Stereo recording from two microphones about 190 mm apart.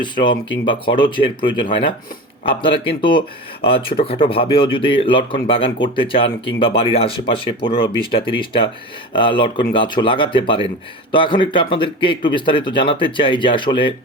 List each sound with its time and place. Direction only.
0.0 s speech: 25° left (ahead or behind)